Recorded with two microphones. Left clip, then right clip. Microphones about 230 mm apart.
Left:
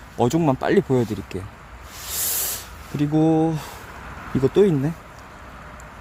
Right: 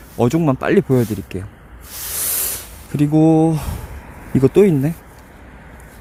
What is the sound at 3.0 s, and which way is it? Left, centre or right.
Speech, centre.